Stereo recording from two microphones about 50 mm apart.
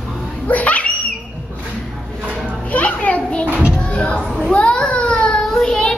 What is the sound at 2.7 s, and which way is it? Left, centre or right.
Children playing, left.